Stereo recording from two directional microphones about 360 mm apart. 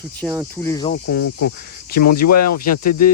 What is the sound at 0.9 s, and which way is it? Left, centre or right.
Speech, left.